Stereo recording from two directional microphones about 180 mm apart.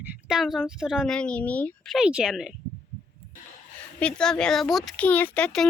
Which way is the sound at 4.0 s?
5° left (ahead or behind).